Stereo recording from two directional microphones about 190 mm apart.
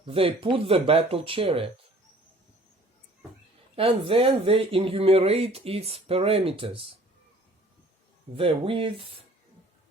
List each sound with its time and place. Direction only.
0.0 s speech: 30° right (ahead or behind)
3.8 s speech: 30° right (ahead or behind)
8.4 s speech: 30° right (ahead or behind)